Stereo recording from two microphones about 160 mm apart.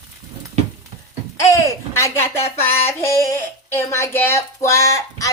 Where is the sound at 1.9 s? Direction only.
15° left (ahead or behind).